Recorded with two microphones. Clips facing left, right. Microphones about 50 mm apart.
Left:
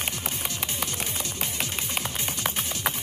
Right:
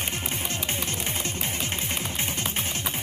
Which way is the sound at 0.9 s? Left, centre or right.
Right.